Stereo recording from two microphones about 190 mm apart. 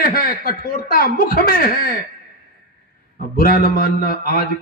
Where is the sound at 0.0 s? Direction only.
50° left (ahead or behind).